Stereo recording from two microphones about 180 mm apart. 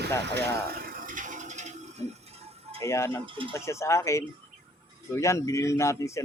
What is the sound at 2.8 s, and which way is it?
Speech, 15° left (ahead or behind).